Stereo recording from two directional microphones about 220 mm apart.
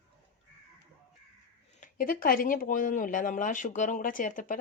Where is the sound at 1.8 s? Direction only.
40° left (ahead or behind).